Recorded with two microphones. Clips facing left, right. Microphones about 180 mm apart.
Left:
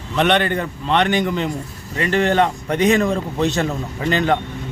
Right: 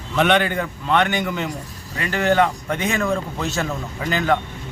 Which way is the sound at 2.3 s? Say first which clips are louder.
Left 1 dB; 35° left (ahead or behind).